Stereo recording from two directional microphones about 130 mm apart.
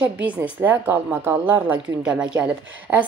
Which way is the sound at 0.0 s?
10° right (ahead or behind).